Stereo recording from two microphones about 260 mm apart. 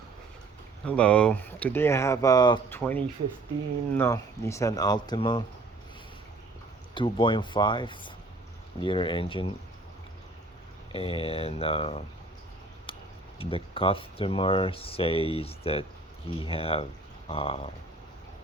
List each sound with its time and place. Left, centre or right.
0.9 s speech: centre
6.9 s speech: centre
10.9 s speech: left
13.4 s speech: left